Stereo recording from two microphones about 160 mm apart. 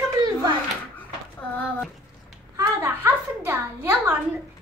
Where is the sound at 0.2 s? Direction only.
25° right (ahead or behind).